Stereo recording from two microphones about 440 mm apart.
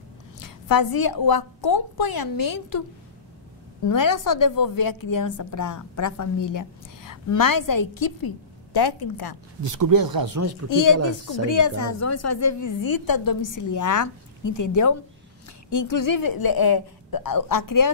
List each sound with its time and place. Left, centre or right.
0.4 s a woman's voice: left
3.8 s a woman's voice: left
9.6 s speech: right
10.7 s a woman's voice: left